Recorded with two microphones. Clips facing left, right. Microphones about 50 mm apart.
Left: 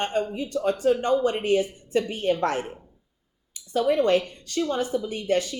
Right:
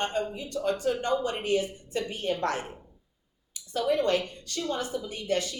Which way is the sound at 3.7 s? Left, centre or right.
Left.